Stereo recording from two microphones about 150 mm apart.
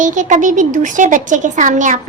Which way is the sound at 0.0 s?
55° right (ahead or behind).